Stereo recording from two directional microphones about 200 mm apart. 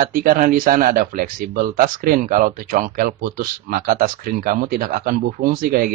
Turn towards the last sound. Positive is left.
turn(degrees=-45)  # may be behind; listen again after turning